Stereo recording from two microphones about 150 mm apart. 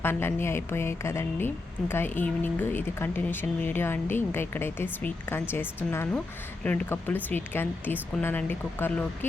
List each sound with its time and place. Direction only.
0.0 s speech: 15° left (ahead or behind)